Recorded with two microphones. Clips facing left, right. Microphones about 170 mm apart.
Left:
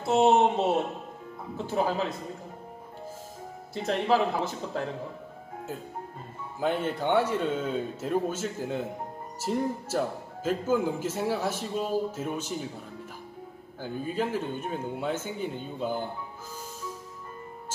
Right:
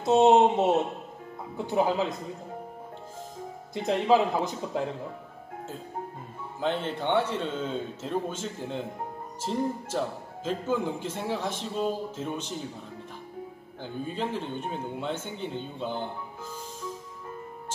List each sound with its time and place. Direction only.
0.0 s speech: 20° right (ahead or behind)
3.7 s speech: 20° right (ahead or behind)
6.6 s speech: 10° left (ahead or behind)
13.8 s speech: 5° left (ahead or behind)